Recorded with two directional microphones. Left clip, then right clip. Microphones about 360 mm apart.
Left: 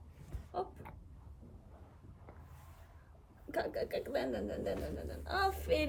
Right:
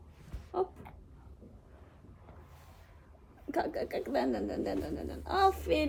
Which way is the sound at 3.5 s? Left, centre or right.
Centre.